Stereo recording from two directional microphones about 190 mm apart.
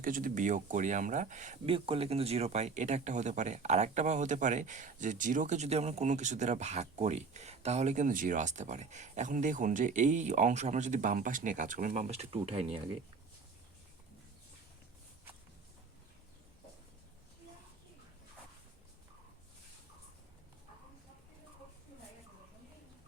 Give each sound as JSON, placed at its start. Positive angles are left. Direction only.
{"t": 0.0, "sound": "speech", "side_deg": -45}
{"t": 1.7, "sound": "speech", "side_deg": -30}